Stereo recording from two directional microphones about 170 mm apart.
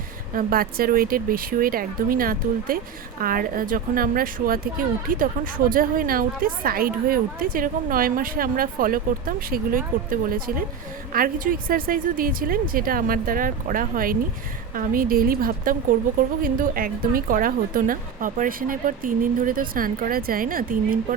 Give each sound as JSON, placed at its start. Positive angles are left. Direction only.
{"t": 0.3, "sound": "speech", "side_deg": -60}